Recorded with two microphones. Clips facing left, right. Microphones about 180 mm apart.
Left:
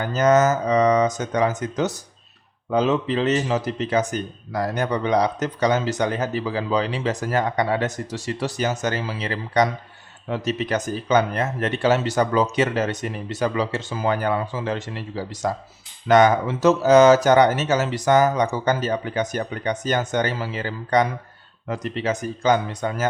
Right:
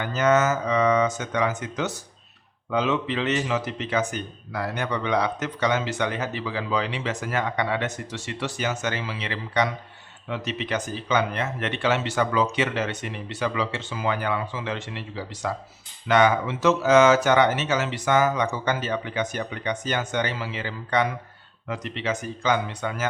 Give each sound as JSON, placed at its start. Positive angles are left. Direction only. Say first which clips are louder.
{"t": 0.0, "sound": "speech", "louder": "left 4 dB", "side_deg": 40}